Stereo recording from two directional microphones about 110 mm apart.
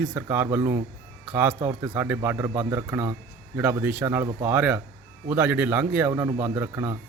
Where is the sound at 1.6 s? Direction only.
30° right (ahead or behind).